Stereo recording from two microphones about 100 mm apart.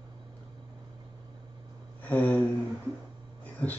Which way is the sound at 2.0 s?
15° left (ahead or behind).